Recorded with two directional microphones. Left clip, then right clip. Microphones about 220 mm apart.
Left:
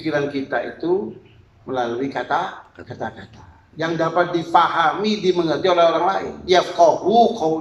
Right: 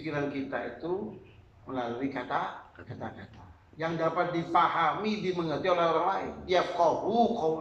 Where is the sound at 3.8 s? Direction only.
50° left (ahead or behind).